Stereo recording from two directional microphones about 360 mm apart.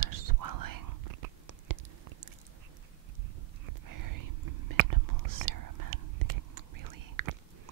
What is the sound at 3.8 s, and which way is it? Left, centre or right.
Whispering, right.